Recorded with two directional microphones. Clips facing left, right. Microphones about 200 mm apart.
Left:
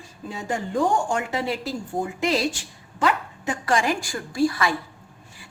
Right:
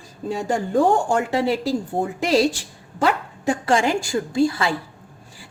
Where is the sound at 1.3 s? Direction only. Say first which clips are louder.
Right 6 dB; 30° right (ahead or behind).